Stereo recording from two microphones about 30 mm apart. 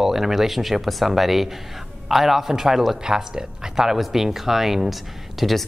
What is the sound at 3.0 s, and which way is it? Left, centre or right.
Speech, right.